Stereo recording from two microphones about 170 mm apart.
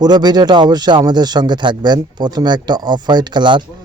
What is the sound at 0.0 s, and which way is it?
A man's voice, 25° right (ahead or behind).